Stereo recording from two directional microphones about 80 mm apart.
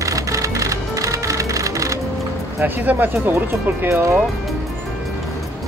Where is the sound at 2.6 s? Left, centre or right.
Right.